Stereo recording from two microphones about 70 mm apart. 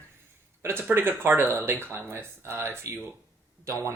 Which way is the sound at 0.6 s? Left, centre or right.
Right.